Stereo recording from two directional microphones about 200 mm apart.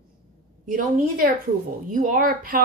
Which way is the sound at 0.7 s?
45° right (ahead or behind).